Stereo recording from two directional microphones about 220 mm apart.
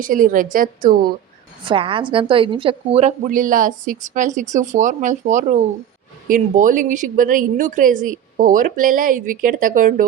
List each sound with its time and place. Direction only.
0.0 s a woman's voice: 40° right (ahead or behind)
1.6 s a woman's voice: 25° right (ahead or behind)